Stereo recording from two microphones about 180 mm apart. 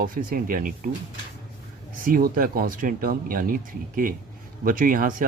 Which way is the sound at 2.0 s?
50° right (ahead or behind).